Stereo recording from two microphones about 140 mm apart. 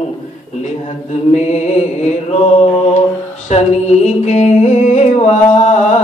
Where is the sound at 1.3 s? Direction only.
55° left (ahead or behind).